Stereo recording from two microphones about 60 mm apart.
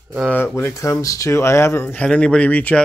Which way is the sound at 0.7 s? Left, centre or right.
Left.